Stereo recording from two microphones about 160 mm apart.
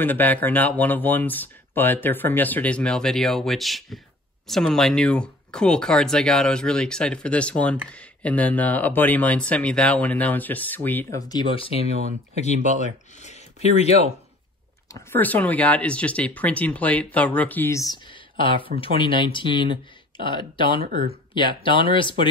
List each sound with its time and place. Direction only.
0.0 s speech: 10° left (ahead or behind)
11.2 s speech: 30° left (ahead or behind)
12.5 s speech: 55° right (ahead or behind)
13.2 s speech: 45° left (ahead or behind)
14.9 s speech: 15° left (ahead or behind)
18.4 s speech: 30° left (ahead or behind)